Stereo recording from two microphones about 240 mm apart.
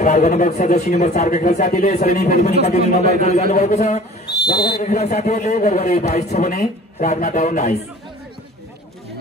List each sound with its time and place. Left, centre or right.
0.0 s a man's voice: left